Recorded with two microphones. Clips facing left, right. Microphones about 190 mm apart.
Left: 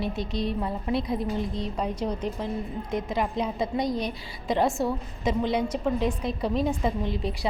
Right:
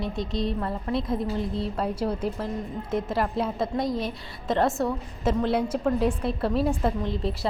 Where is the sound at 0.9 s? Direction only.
Centre (ahead or behind).